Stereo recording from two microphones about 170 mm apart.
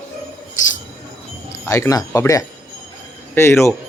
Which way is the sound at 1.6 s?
20° left (ahead or behind).